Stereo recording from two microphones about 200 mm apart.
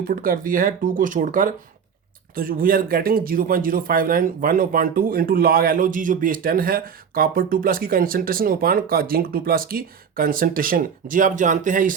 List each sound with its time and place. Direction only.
0.0 s speech: 45° right (ahead or behind)